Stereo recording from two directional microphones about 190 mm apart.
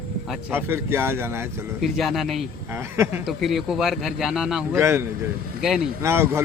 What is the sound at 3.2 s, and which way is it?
Speech, centre (ahead or behind).